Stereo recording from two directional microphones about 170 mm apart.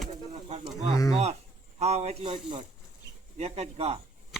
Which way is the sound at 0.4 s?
40° right (ahead or behind).